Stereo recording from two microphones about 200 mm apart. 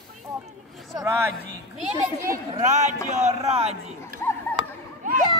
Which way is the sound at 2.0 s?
15° right (ahead or behind).